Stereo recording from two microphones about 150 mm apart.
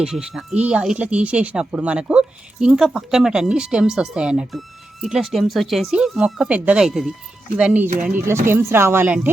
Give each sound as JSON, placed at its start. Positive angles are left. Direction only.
{"t": 0.0, "sound": "a woman's voice", "side_deg": -5}